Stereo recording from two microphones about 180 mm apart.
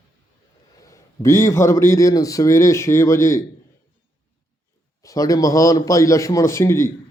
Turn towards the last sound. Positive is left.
turn(degrees=15)  # may be behind; listen again after turning